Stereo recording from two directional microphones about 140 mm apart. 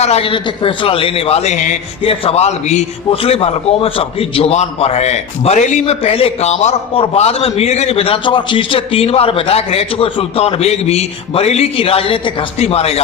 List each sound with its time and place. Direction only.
0.0 s a man's voice: 45° left (ahead or behind)